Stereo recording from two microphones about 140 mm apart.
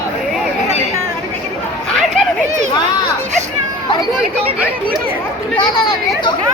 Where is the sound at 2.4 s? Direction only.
55° right (ahead or behind).